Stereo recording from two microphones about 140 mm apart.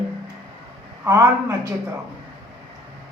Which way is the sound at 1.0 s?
20° right (ahead or behind).